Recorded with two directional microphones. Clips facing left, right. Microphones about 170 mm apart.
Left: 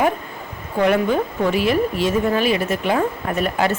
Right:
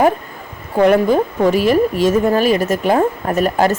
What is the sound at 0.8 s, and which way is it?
A woman's voice, 40° right (ahead or behind).